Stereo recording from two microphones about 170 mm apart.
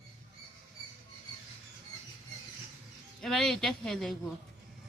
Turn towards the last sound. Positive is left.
turn(degrees=0)  # may be behind; listen again after turning